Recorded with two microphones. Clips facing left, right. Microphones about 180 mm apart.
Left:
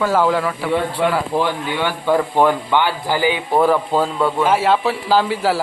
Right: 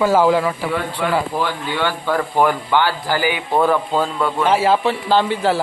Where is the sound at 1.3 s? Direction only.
20° left (ahead or behind).